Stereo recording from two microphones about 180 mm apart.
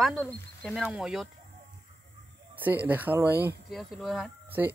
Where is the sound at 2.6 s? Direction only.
10° right (ahead or behind).